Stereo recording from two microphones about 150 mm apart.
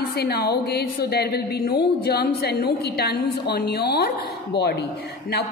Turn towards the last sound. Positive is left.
turn(degrees=90)